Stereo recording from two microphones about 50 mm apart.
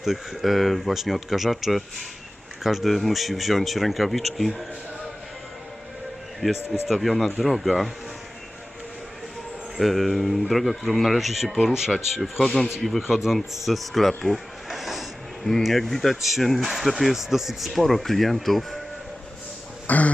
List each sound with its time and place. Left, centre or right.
0.0 s speech: centre
6.4 s speech: centre
9.7 s speech: centre
19.9 s a sound: left